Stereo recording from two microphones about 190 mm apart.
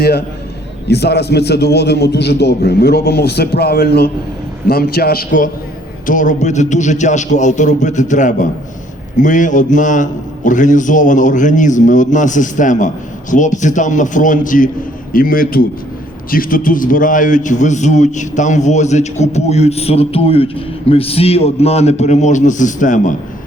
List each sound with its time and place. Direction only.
0.9 s a man's voice: 60° left (ahead or behind); by 23.1 s 40° left (ahead or behind)